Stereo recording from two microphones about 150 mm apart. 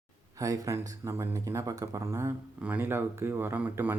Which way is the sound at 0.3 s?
25° right (ahead or behind).